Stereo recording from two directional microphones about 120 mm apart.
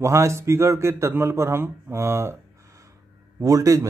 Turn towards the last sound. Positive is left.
turn(degrees=-30)  # may be behind; listen again after turning